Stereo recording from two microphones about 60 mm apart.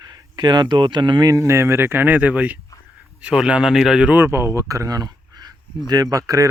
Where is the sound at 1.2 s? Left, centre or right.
Right.